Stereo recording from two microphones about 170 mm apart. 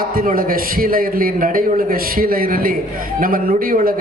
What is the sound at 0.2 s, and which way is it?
A man's voice, 55° right (ahead or behind).